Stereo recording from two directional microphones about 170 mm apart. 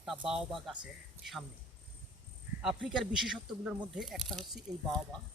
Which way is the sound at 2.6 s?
5° right (ahead or behind).